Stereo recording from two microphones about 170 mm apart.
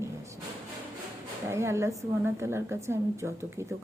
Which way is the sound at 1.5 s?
15° right (ahead or behind).